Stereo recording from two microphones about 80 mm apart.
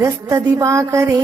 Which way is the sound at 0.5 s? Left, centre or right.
Right.